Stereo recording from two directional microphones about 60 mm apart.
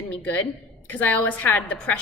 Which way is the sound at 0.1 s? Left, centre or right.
Left.